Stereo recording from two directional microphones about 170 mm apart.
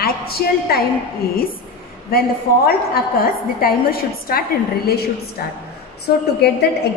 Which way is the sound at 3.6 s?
60° left (ahead or behind).